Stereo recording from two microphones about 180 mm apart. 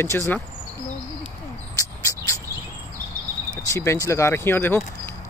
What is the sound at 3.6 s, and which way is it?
Speech, 15° left (ahead or behind).